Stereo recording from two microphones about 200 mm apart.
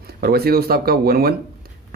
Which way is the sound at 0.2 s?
50° right (ahead or behind).